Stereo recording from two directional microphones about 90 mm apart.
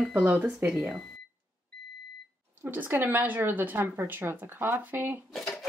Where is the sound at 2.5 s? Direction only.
20° right (ahead or behind).